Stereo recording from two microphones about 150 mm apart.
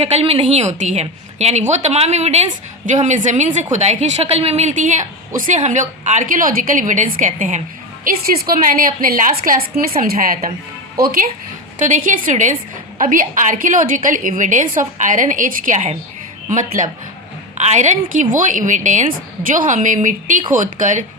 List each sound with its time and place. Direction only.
0.0 s a woman's voice: 40° right (ahead or behind); by 11.3 s 80° right
11.8 s a woman's voice: 60° right (ahead or behind)